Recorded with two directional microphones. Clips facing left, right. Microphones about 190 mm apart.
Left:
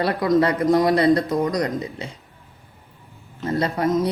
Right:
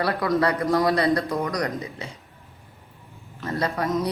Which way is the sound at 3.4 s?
25° left (ahead or behind).